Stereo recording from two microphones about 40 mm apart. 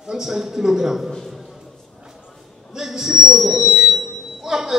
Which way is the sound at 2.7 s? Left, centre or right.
Centre.